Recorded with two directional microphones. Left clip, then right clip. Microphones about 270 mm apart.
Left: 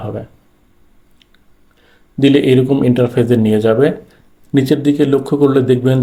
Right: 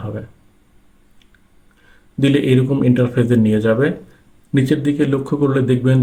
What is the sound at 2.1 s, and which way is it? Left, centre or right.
Speech, centre.